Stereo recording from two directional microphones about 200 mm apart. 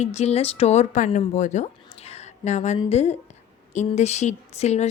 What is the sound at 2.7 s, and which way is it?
A woman's voice, 30° left (ahead or behind).